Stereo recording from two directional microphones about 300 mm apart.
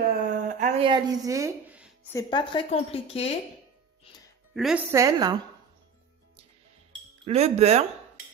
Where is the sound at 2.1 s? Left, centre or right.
Centre.